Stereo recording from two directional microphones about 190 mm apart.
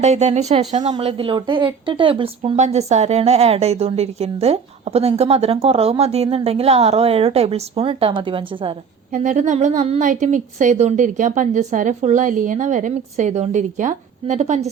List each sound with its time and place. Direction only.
0.0 s speech: 35° right (ahead or behind)
9.1 s speech: 40° right (ahead or behind)